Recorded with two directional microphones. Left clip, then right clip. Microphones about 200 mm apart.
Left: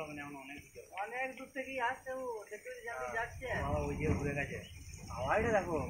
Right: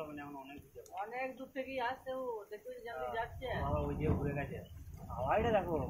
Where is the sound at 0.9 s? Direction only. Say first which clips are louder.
Left 1 dB; 5° left (ahead or behind).